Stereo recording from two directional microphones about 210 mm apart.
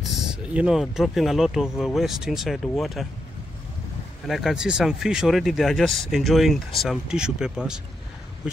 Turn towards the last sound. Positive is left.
turn(degrees=-5)  # may be behind; listen again after turning